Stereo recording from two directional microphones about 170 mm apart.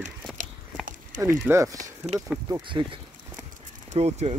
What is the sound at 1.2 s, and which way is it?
Speech, 15° right (ahead or behind).